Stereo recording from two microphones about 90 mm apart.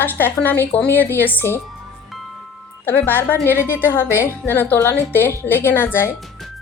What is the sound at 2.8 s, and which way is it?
A woman's voice, 25° left (ahead or behind).